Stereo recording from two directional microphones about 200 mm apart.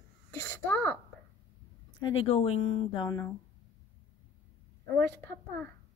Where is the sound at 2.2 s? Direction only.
30° left (ahead or behind).